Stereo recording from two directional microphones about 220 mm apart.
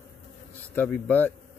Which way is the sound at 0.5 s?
5° left (ahead or behind).